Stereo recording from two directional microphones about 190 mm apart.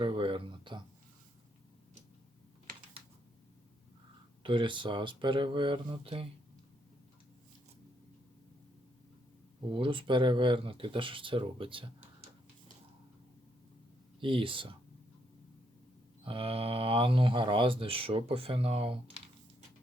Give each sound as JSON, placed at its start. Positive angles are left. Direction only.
{"t": 0.0, "sound": "speech", "side_deg": -25}
{"t": 4.4, "sound": "speech", "side_deg": -25}
{"t": 9.7, "sound": "speech", "side_deg": -25}
{"t": 14.2, "sound": "speech", "side_deg": -25}
{"t": 16.2, "sound": "speech", "side_deg": -30}